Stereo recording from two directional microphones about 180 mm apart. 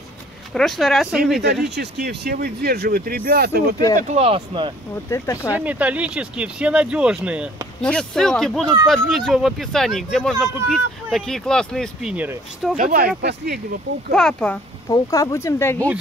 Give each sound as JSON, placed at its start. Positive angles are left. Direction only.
{"t": 0.6, "sound": "speech", "side_deg": 0}
{"t": 1.8, "sound": "speech", "side_deg": -65}
{"t": 4.1, "sound": "speech", "side_deg": -35}
{"t": 5.1, "sound": "speech", "side_deg": 15}
{"t": 5.5, "sound": "speech", "side_deg": -10}
{"t": 7.8, "sound": "speech", "side_deg": 5}
{"t": 12.7, "sound": "speech", "side_deg": -50}
{"t": 13.2, "sound": "speech", "side_deg": -65}
{"t": 14.1, "sound": "speech", "side_deg": 5}
{"t": 14.9, "sound": "speech", "side_deg": 20}